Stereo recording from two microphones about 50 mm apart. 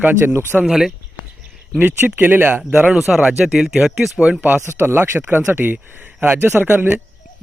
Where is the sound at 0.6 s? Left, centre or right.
Centre.